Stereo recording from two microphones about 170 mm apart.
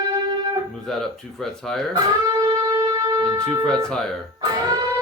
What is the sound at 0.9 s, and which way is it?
Speech, centre (ahead or behind).